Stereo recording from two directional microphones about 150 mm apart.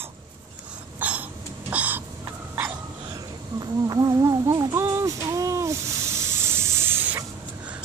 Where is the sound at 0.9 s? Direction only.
10° right (ahead or behind).